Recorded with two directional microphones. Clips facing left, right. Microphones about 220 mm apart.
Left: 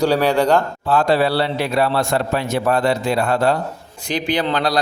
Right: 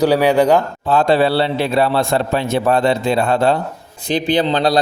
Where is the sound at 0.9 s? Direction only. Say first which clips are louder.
Right 2 dB; 25° right (ahead or behind).